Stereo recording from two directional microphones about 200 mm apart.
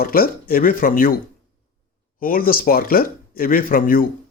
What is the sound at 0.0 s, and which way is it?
Speech, 45° left (ahead or behind).